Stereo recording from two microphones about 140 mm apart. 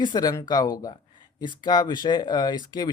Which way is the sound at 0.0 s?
30° left (ahead or behind).